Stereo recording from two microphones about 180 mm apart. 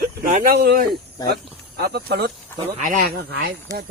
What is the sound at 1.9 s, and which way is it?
Speech, 65° right (ahead or behind).